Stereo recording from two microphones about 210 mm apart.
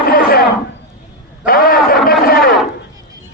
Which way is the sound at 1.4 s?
45° left (ahead or behind).